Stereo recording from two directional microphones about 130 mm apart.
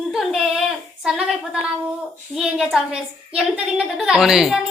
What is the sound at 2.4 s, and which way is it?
Speech, 5° right (ahead or behind).